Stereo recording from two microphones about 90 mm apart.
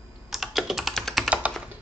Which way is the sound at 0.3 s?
Centre (ahead or behind).